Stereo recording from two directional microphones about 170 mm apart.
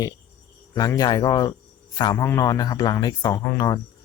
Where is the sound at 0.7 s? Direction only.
20° left (ahead or behind).